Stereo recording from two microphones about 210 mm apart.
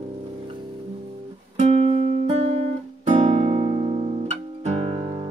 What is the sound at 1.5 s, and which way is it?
Music, 30° right (ahead or behind).